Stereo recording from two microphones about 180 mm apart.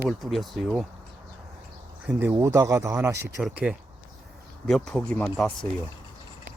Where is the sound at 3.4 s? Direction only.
5° right (ahead or behind).